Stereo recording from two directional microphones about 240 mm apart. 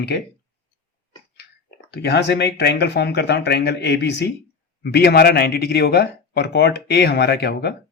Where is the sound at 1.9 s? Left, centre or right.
Left.